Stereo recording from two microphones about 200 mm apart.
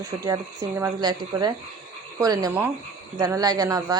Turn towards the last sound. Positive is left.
turn(degrees=-20)  # may be behind; listen again after turning